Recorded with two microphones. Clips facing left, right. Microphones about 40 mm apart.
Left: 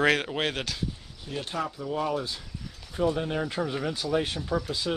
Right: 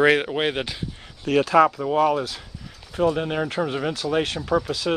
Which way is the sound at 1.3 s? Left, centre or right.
Right.